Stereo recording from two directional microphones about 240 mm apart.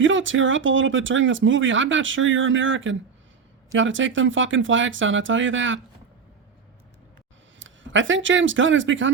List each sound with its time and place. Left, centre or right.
0.0 s speech: right
7.6 s speech: right